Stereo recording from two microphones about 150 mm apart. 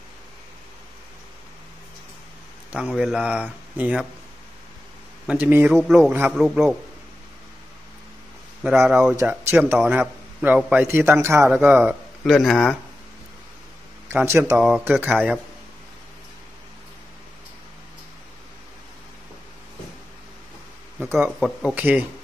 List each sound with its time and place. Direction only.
2.7 s speech: 5° right (ahead or behind)
5.2 s a man's voice: 10° right (ahead or behind)
5.7 s speech: centre (ahead or behind)
8.6 s a man's voice: 10° right (ahead or behind)
12.3 s speech: centre (ahead or behind)
14.0 s speech: 15° right (ahead or behind)
14.6 s speech: 5° right (ahead or behind)
21.0 s a sound: 10° right (ahead or behind)
21.4 s a man's voice: 10° right (ahead or behind)